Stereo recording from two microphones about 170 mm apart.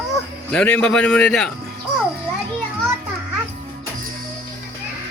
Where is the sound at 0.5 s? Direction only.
5° left (ahead or behind).